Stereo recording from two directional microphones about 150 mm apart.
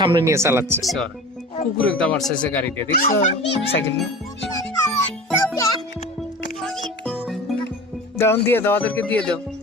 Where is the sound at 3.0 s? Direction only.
70° left (ahead or behind).